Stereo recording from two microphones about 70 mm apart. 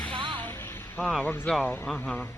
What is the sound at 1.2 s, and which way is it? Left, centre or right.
Speech, left.